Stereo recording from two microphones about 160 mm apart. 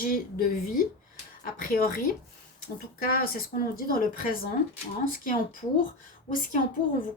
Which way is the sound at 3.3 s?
65° left (ahead or behind).